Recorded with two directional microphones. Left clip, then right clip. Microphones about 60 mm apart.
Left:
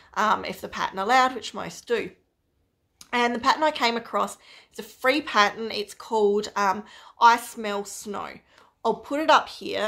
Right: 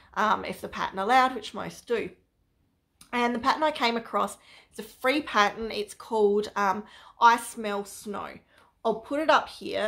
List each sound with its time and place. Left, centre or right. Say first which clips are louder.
0.0 s speech: left 2 dB; left
3.0 s speech: left 3 dB; left
8.8 s speech: left 3 dB; left